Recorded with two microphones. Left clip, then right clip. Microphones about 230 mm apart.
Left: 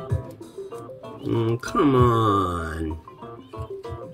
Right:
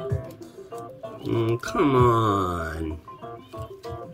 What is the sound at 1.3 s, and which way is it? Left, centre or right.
Speech, centre.